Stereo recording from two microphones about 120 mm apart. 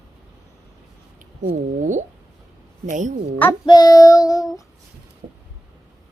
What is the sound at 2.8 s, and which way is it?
Speech, 90° right.